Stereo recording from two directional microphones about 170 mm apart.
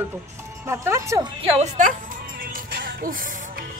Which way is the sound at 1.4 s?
40° right (ahead or behind).